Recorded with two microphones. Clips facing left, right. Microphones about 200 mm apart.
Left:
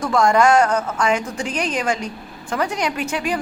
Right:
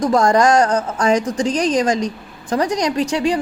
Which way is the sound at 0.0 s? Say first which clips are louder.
Right 2 dB; 40° right (ahead or behind).